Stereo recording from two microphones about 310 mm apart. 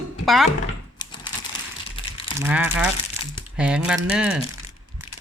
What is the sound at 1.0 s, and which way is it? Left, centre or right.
Typing, centre.